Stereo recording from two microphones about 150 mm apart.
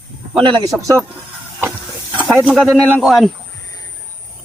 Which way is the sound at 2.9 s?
Centre (ahead or behind).